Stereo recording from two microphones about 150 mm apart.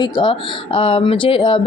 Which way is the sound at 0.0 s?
35° left (ahead or behind).